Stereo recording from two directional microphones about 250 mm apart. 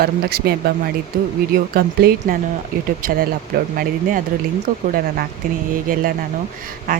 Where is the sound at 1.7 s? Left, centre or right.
Right.